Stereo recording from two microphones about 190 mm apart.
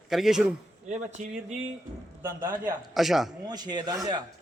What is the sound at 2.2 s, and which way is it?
Speech, 15° right (ahead or behind).